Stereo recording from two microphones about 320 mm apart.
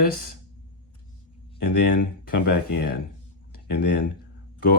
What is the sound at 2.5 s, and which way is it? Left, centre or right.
Speech, left.